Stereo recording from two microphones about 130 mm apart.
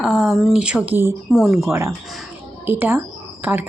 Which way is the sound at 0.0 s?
Centre (ahead or behind).